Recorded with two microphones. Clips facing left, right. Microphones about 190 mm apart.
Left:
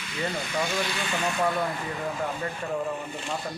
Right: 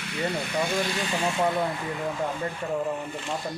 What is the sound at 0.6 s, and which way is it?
Speech, 50° right (ahead or behind).